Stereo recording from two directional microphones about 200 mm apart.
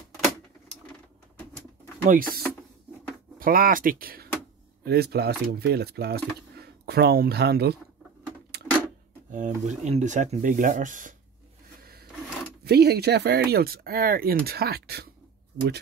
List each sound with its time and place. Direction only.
2.0 s speech: 45° right (ahead or behind)
8.5 s a sound: 55° right (ahead or behind)
9.3 s speech: 35° right (ahead or behind)
12.6 s speech: 55° right (ahead or behind)